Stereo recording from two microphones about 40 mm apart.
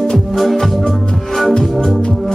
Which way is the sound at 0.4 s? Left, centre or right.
Centre.